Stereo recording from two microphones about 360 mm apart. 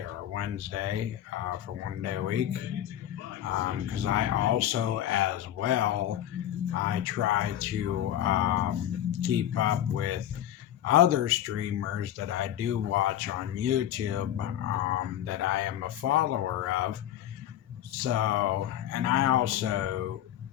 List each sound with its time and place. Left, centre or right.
0.3 s speech: right
18.0 s speech: right